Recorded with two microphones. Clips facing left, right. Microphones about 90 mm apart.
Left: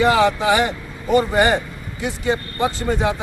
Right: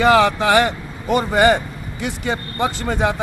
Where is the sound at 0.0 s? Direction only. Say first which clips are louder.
Right 2 dB; 75° right (ahead or behind).